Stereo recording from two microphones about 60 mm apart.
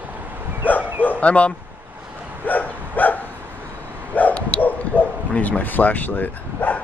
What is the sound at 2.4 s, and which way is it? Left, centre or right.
Dog, left.